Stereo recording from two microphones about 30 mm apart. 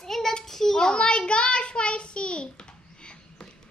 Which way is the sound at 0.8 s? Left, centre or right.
Left.